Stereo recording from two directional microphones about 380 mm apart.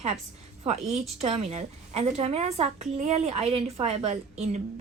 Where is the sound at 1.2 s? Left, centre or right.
Centre.